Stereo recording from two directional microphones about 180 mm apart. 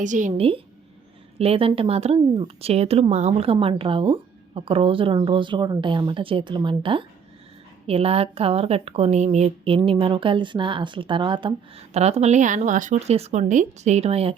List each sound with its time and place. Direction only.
0.0 s speech: 45° right (ahead or behind)